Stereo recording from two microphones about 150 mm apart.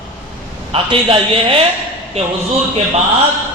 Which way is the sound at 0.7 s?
35° right (ahead or behind).